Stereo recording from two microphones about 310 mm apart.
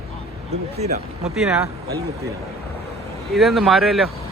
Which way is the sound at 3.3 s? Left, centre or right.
Centre.